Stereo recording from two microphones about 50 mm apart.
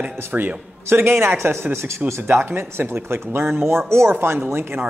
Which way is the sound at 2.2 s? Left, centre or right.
Right.